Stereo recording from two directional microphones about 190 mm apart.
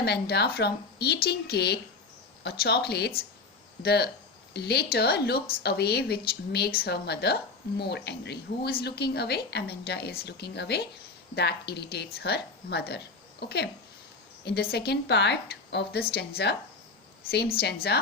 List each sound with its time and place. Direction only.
0.0 s a woman's voice: 60° left (ahead or behind)
17.9 s a woman's voice: 60° left (ahead or behind)